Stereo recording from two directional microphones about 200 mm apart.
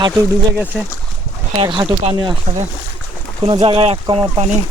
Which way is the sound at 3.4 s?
25° right (ahead or behind).